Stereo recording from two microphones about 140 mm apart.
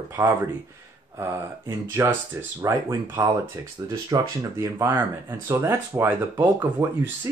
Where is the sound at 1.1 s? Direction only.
20° right (ahead or behind).